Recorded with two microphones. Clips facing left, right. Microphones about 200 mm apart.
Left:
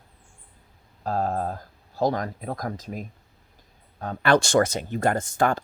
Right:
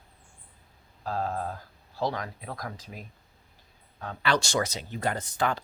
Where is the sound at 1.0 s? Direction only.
45° left (ahead or behind).